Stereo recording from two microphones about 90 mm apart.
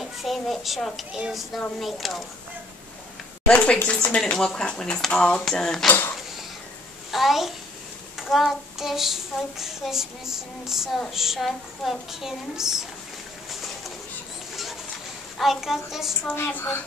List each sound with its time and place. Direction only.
0.0 s a child's voice: centre (ahead or behind)
1.1 s child singing: 5° right (ahead or behind)
3.4 s speech: 10° left (ahead or behind)
5.9 s a sound: 20° left (ahead or behind)
7.1 s a child's voice: centre (ahead or behind)
8.2 s child singing: centre (ahead or behind)
14.5 s bird: centre (ahead or behind)
15.3 s child singing: centre (ahead or behind)
16.3 s a woman's voice: 25° left (ahead or behind)